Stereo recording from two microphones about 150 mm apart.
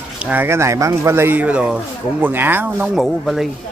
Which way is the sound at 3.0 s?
Centre (ahead or behind).